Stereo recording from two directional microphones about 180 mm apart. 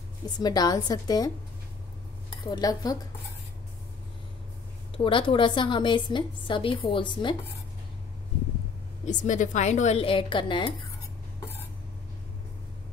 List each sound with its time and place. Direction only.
0.4 s a woman's voice: 20° left (ahead or behind)
2.4 s a woman's voice: 20° left (ahead or behind)
4.9 s a woman's voice: 30° left (ahead or behind)
9.0 s a woman's voice: 45° left (ahead or behind); by 10.7 s 30° left (ahead or behind)